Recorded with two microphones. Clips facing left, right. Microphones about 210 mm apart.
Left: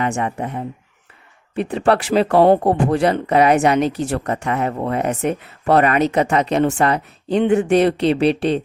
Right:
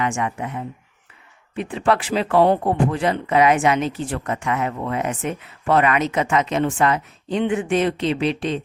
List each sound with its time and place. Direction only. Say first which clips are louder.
0.0 s speech: left 2 dB; 40° left (ahead or behind)